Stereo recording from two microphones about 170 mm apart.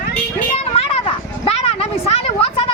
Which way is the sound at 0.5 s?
35° left (ahead or behind).